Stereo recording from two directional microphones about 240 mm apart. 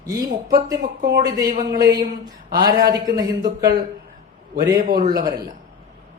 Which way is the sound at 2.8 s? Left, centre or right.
Centre.